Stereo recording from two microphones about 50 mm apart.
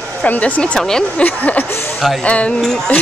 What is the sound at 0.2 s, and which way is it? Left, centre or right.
Speech, left.